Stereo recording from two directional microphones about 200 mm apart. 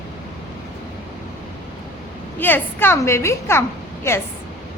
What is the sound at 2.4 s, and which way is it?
A woman's voice, 10° left (ahead or behind).